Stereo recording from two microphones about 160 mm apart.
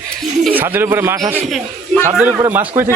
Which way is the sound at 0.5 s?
15° right (ahead or behind).